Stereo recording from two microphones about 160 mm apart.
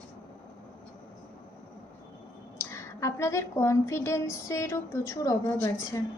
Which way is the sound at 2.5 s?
15° left (ahead or behind).